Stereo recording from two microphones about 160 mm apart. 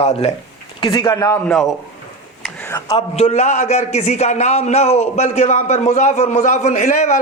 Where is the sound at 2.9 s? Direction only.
40° left (ahead or behind).